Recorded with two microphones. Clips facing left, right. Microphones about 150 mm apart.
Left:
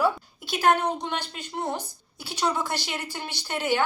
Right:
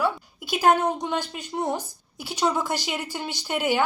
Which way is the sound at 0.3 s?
15° right (ahead or behind).